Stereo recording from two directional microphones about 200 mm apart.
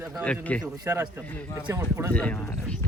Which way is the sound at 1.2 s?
10° left (ahead or behind).